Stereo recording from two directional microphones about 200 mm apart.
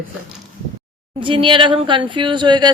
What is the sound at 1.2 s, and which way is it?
Speech, 25° right (ahead or behind).